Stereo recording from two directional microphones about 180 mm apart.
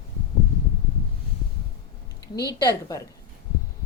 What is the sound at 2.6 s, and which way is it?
Speech, 20° left (ahead or behind).